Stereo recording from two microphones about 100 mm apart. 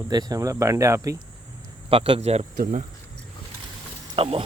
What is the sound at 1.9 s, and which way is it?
Speech, 65° right (ahead or behind).